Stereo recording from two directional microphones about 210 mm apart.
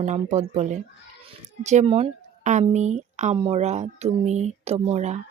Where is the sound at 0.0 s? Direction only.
35° right (ahead or behind).